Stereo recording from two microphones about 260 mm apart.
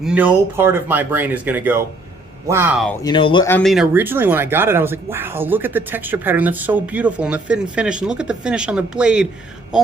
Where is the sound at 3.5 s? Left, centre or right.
Centre.